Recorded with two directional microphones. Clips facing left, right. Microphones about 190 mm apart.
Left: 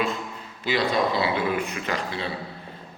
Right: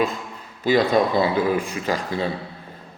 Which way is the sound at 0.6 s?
45° right (ahead or behind).